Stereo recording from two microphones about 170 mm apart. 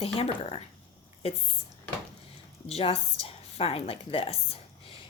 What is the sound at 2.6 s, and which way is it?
A woman's voice, 35° left (ahead or behind).